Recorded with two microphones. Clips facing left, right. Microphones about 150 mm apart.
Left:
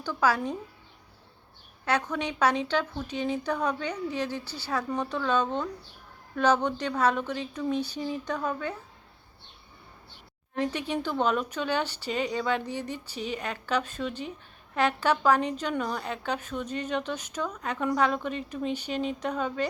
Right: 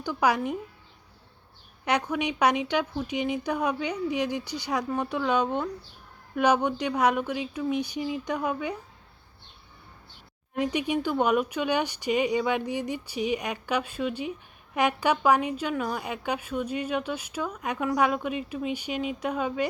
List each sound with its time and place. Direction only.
0.0 s a woman's voice: 15° right (ahead or behind)
1.8 s a woman's voice: 15° right (ahead or behind)
10.5 s a woman's voice: 15° right (ahead or behind)